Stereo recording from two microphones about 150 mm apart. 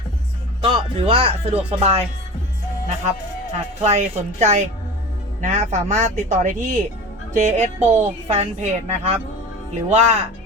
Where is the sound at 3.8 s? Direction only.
50° right (ahead or behind).